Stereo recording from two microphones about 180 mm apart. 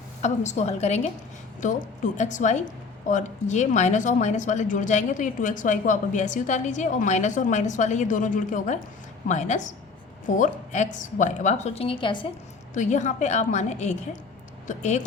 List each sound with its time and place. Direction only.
0.2 s a woman's voice: 40° left (ahead or behind)
12.7 s a woman's voice: 45° left (ahead or behind)